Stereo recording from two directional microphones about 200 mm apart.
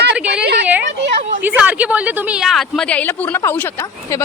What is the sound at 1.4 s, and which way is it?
Speech, 5° right (ahead or behind).